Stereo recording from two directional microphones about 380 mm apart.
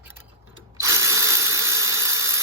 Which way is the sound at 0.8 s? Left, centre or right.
Centre.